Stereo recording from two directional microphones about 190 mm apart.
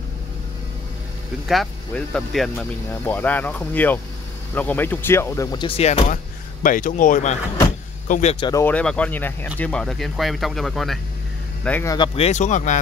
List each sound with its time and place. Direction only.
1.5 s speech: centre (ahead or behind); by 6.1 s 35° left (ahead or behind)
6.6 s speech: 45° left (ahead or behind)
8.5 s speech: 15° left (ahead or behind)
11.6 s speech: 10° left (ahead or behind)
12.2 s speech: 35° left (ahead or behind)